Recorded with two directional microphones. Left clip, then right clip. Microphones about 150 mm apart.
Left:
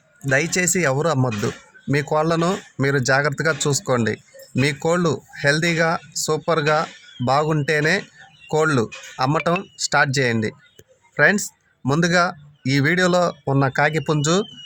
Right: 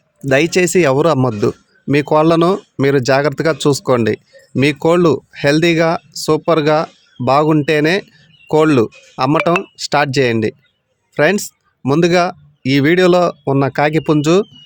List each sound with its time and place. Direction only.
0.3 s a man's voice: 50° right (ahead or behind)